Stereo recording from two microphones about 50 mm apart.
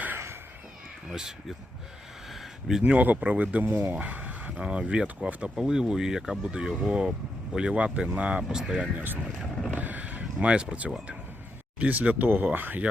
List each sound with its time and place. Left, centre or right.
2.3 s a sound: centre
2.8 s speech: right
3.7 s speech: right
3.9 s a sound: right
4.5 s speech: right
5.5 s speech: centre
8.4 s speech: centre
8.7 s speech: right
9.7 s a sound: right
11.8 s speech: right